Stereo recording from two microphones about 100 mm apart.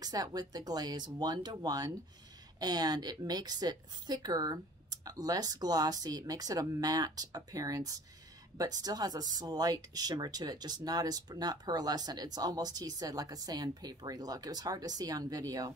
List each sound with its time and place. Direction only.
0.0 s speech: 40° right (ahead or behind)